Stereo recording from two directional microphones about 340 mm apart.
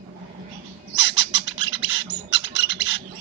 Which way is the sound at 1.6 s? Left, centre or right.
Centre.